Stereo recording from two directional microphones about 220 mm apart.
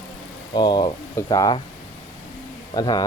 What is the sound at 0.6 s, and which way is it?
Speech, 20° left (ahead or behind).